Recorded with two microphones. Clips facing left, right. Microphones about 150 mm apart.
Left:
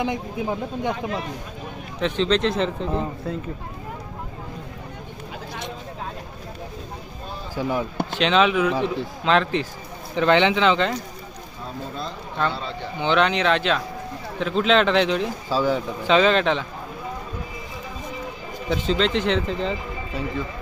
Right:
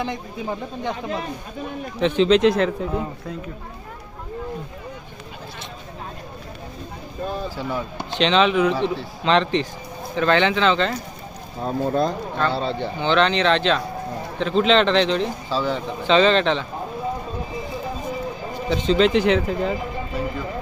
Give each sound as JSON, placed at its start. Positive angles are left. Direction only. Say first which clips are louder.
{"t": 0.0, "sound": "speech", "louder": "left 2 dB", "side_deg": 10}
{"t": 2.0, "sound": "a man's voice", "louder": "right 5 dB", "side_deg": -5}
{"t": 7.5, "sound": "speech", "louder": "left 3 dB", "side_deg": 15}
{"t": 8.7, "sound": "speech", "louder": "right 1 dB", "side_deg": 15}
{"t": 9.2, "sound": "speech", "louder": "right 2 dB", "side_deg": 5}
{"t": 10.2, "sound": "speech", "louder": "left 1 dB", "side_deg": 15}
{"t": 11.6, "sound": "speech", "louder": "right 11 dB", "side_deg": -50}
{"t": 12.5, "sound": "speech", "louder": "right 7 dB", "side_deg": -30}
{"t": 13.0, "sound": "speech", "louder": "right 1 dB", "side_deg": 10}
{"t": 18.7, "sound": "a man's voice", "louder": "right 4 dB", "side_deg": 5}